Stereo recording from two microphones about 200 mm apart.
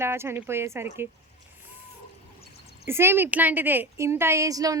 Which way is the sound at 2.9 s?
10° right (ahead or behind).